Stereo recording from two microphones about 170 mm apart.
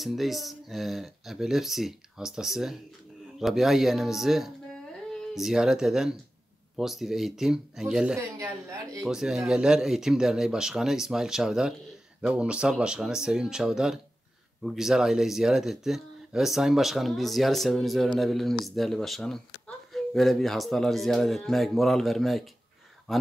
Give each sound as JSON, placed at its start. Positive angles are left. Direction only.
{"t": 0.0, "sound": "speech", "side_deg": 0}
{"t": 8.4, "sound": "a woman's voice", "side_deg": -20}
{"t": 9.0, "sound": "speech", "side_deg": 0}